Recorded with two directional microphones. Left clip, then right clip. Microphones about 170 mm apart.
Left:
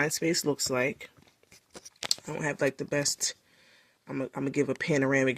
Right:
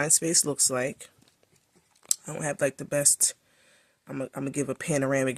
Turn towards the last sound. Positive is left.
turn(degrees=-30)  # may be behind; listen again after turning